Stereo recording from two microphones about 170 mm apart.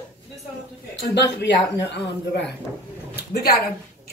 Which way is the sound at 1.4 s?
90° left.